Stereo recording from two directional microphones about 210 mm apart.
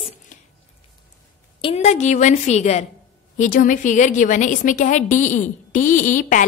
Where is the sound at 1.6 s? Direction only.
30° left (ahead or behind).